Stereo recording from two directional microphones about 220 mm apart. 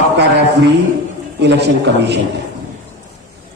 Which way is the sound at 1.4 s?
50° right (ahead or behind).